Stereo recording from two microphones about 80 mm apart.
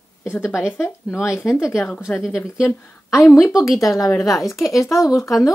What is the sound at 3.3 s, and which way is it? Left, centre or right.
Speech, left.